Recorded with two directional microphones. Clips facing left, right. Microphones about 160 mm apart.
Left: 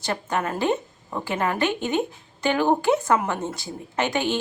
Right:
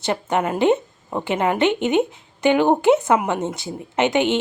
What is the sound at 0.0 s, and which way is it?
A woman's voice, 20° right (ahead or behind).